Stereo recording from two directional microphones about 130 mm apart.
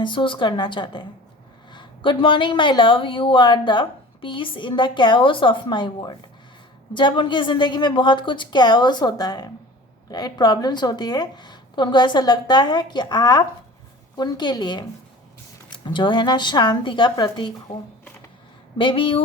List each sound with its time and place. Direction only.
0.0 s speech: 40° left (ahead or behind)
18.8 s speech: 40° left (ahead or behind)